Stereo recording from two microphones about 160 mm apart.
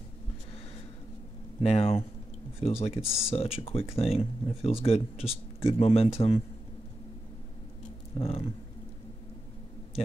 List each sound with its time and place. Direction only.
1.6 s speech: 40° left (ahead or behind)
3.0 s speech: 5° right (ahead or behind)
3.3 s speech: 40° left (ahead or behind)
8.2 s a sound: 40° left (ahead or behind)